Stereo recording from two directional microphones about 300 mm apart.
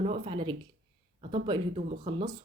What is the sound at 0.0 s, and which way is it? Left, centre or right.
Speech, centre.